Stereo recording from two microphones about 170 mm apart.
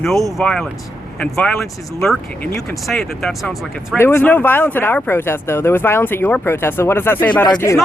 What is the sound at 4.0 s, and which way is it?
Speech, 10° left (ahead or behind).